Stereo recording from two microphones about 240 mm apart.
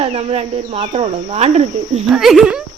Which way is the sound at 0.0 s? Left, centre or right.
Right.